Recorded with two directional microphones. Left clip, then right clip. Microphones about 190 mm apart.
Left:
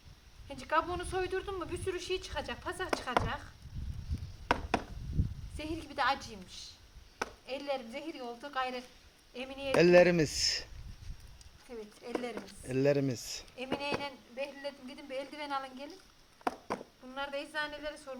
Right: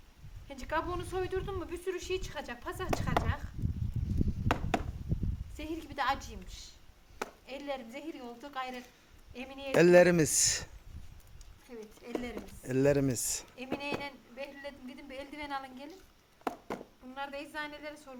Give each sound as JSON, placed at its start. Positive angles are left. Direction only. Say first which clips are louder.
{"t": 0.4, "sound": "speech", "louder": "left 3 dB", "side_deg": -5}
{"t": 4.5, "sound": "a sound", "louder": "left 2 dB", "side_deg": 0}
{"t": 5.5, "sound": "speech", "louder": "left 1 dB", "side_deg": 0}
{"t": 9.7, "sound": "speech", "louder": "right 1 dB", "side_deg": -30}
{"t": 11.7, "sound": "speech", "louder": "left 1 dB", "side_deg": 0}
{"t": 12.6, "sound": "speech", "louder": "right 2 dB", "side_deg": -30}
{"t": 13.6, "sound": "speech", "louder": "left 4 dB", "side_deg": 0}